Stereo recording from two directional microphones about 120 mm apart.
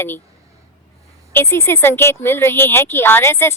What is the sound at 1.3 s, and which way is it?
Speech, 20° left (ahead or behind).